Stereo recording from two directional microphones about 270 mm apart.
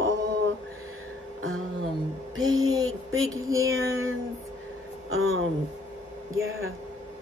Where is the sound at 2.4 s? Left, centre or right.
Centre.